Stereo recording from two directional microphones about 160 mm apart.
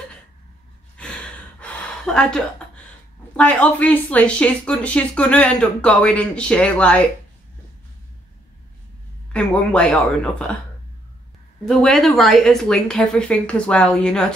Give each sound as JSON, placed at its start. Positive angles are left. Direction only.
{"t": 0.9, "sound": "gasp", "side_deg": 5}
{"t": 3.3, "sound": "speech", "side_deg": 10}
{"t": 9.3, "sound": "speech", "side_deg": 5}
{"t": 11.6, "sound": "a woman's voice", "side_deg": 5}